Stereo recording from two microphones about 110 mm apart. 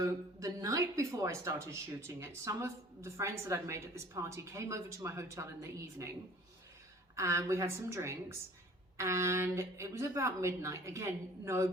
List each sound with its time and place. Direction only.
0.0 s a woman's voice: 30° right (ahead or behind)
7.2 s a woman's voice: 25° right (ahead or behind)